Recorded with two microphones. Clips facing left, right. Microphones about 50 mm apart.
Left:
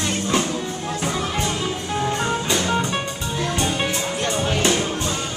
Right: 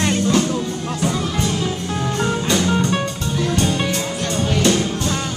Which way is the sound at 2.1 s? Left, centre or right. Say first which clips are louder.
Right 3 dB; centre.